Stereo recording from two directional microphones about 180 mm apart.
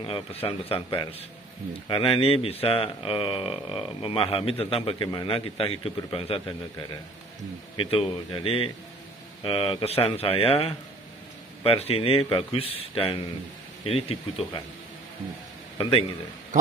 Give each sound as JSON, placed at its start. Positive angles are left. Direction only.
{"t": 0.0, "sound": "a man's voice", "side_deg": 30}
{"t": 7.7, "sound": "speech", "side_deg": 30}
{"t": 15.8, "sound": "speech", "side_deg": 30}